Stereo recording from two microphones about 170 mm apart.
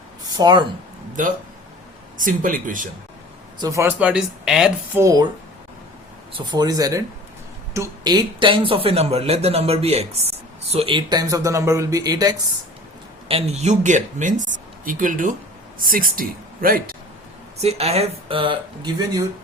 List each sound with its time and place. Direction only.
0.3 s speech: 25° right (ahead or behind)
2.1 s a woman's voice: 50° right (ahead or behind)
3.6 s speech: 15° right (ahead or behind)
4.9 s speech: 20° right (ahead or behind)
6.3 s speech: 25° right (ahead or behind)
13.2 s a woman's voice: 35° right (ahead or behind); by 16.9 s 60° right (ahead or behind)
17.6 s speech: 40° right (ahead or behind)